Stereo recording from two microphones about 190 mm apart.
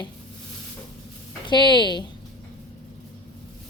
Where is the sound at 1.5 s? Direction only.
25° left (ahead or behind).